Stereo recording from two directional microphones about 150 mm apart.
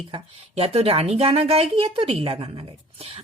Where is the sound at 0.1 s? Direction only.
40° right (ahead or behind).